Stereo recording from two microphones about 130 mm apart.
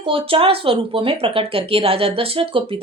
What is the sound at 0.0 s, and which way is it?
Speech, 45° right (ahead or behind).